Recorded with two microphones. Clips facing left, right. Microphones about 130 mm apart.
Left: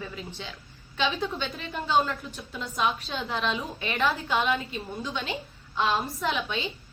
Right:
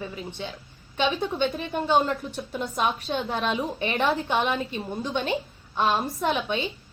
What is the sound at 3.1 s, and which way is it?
Speech, 50° right (ahead or behind).